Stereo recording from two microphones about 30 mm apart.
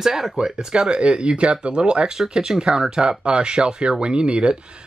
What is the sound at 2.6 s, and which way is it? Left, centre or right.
Speech, right.